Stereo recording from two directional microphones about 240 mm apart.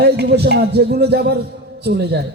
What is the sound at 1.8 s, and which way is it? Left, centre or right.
Music, right.